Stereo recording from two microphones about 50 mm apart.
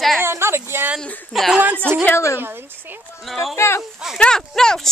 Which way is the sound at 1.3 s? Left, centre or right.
Centre.